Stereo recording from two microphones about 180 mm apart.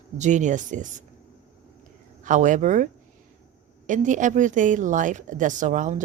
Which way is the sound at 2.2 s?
45° right (ahead or behind).